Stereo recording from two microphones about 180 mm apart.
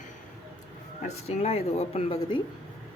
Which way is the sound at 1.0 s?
35° left (ahead or behind).